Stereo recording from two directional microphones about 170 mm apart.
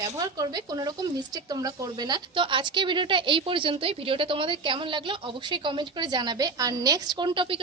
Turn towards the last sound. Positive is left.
turn(degrees=-30)  # may be behind; listen again after turning